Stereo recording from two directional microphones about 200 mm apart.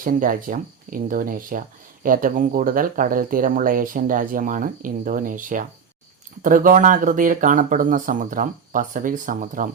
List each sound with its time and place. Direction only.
0.0 s speech: 45° right (ahead or behind)